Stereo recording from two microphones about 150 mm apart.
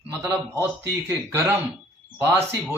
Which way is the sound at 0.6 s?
15° right (ahead or behind).